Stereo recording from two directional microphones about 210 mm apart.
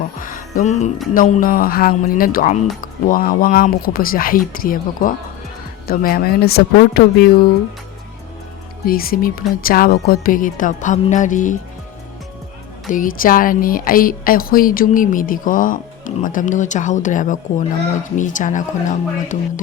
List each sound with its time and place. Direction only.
0.2 s music: 40° left (ahead or behind)
1.1 s speech: 40° left (ahead or behind)
8.9 s a woman's voice: 45° left (ahead or behind)
12.9 s a woman's voice: 40° left (ahead or behind)